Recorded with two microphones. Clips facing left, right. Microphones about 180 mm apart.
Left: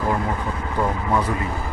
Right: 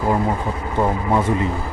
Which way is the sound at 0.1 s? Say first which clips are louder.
Right 4 dB; 25° right (ahead or behind).